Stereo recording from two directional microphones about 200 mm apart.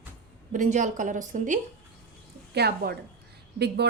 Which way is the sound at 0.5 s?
40° right (ahead or behind).